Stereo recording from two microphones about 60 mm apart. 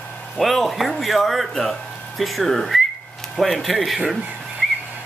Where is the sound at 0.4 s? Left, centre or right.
Centre.